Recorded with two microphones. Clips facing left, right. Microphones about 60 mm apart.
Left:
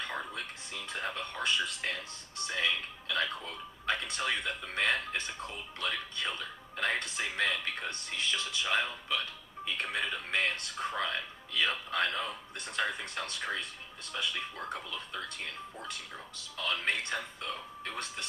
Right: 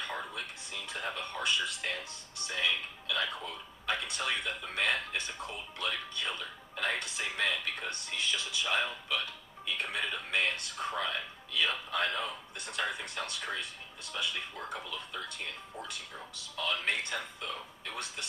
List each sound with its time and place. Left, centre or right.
0.9 s speech: left